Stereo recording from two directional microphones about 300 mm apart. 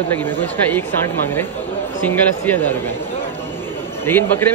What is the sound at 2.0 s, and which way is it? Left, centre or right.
Speech, centre.